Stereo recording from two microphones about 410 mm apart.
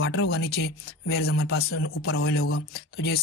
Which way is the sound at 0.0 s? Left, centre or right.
Left.